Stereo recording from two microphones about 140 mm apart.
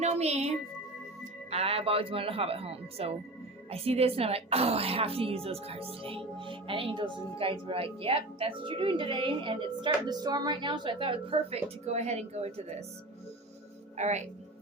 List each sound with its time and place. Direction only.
0.0 s speech: 50° right (ahead or behind)
13.9 s speech: 55° right (ahead or behind)